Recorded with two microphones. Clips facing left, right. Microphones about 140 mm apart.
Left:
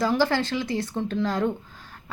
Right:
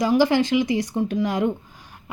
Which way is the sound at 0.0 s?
15° right (ahead or behind).